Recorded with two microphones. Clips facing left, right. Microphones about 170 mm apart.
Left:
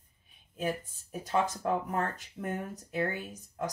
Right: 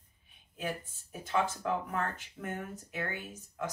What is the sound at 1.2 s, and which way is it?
Speech, 40° left (ahead or behind).